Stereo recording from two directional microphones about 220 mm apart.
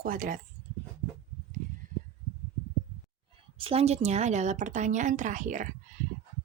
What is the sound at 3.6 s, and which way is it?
Speech, 25° right (ahead or behind).